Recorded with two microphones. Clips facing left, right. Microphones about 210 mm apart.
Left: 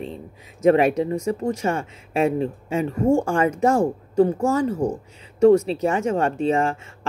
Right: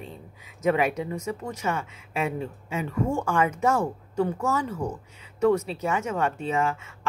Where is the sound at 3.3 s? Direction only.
30° left (ahead or behind).